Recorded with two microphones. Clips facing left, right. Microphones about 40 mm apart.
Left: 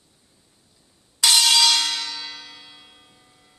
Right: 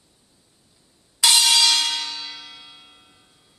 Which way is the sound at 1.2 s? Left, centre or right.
Centre.